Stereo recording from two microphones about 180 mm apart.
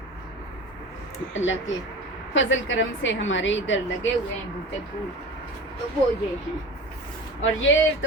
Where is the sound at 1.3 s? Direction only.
90° left.